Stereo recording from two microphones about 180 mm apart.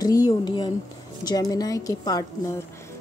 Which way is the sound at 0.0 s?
20° left (ahead or behind).